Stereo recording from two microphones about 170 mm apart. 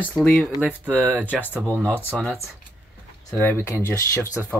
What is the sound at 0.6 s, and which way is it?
Speech, 10° right (ahead or behind).